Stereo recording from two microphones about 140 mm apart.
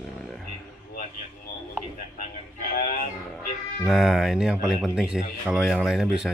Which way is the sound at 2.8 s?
60° left (ahead or behind).